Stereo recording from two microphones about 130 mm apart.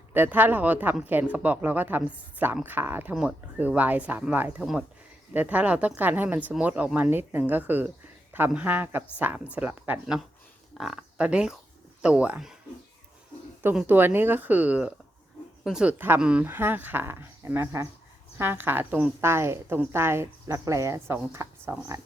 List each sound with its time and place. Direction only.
0.1 s speech: 15° right (ahead or behind)
13.7 s speech: 15° right (ahead or behind)